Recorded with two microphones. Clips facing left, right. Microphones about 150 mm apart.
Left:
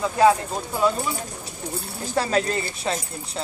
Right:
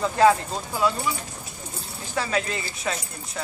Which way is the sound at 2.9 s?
30° left (ahead or behind).